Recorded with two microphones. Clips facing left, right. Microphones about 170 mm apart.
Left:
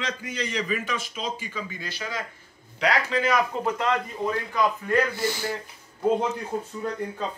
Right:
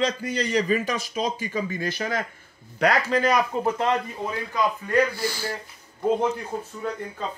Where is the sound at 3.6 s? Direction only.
25° right (ahead or behind).